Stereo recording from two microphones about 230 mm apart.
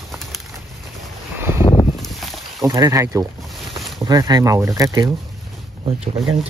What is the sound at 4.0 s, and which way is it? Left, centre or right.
Speech, centre.